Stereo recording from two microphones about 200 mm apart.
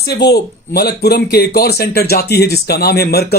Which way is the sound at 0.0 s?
55° left (ahead or behind).